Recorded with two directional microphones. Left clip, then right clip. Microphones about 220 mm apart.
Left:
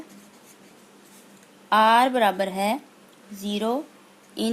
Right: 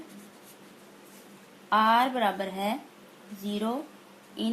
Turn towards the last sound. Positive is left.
turn(degrees=50)  # may be behind; listen again after turning